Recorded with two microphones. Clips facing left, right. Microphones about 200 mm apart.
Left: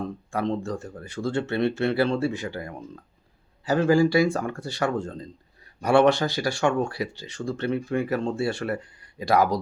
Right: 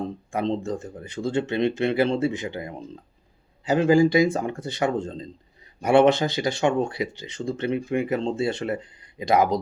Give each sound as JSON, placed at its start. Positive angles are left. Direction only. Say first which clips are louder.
{"t": 0.0, "sound": "speech", "louder": "right 1 dB", "side_deg": -20}